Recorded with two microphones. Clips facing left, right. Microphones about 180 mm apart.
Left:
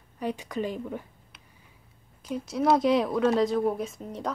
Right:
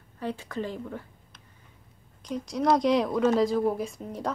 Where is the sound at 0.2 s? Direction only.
15° left (ahead or behind).